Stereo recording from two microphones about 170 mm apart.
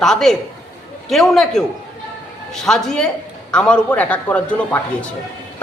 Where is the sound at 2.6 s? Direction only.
5° left (ahead or behind).